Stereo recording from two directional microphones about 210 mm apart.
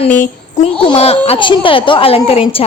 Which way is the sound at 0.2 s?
30° left (ahead or behind).